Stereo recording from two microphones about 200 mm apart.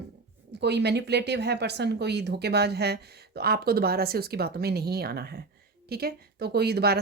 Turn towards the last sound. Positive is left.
turn(degrees=-55)  # may be behind; listen again after turning